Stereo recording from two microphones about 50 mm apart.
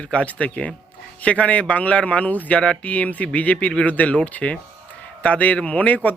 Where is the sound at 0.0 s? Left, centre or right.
Left.